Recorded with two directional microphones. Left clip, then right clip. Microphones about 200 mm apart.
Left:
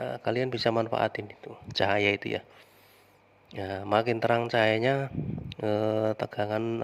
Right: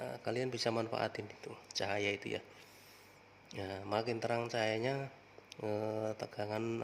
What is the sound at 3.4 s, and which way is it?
Speech, 25° left (ahead or behind).